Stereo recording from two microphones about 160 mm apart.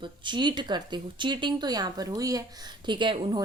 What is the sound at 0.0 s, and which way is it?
A woman's voice, 30° right (ahead or behind).